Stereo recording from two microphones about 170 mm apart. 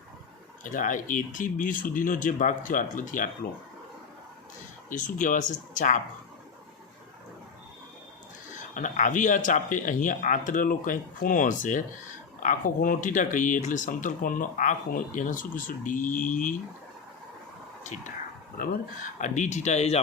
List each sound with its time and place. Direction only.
0.6 s speech: 50° left (ahead or behind)
4.9 s speech: 50° left (ahead or behind)
8.5 s speech: 50° left (ahead or behind)
19.2 s speech: 45° left (ahead or behind)